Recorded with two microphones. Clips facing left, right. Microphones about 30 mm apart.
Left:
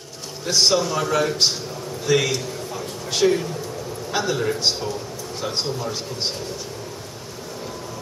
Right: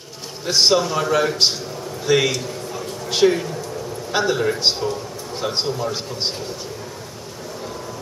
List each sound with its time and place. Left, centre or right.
0.5 s a man's voice: right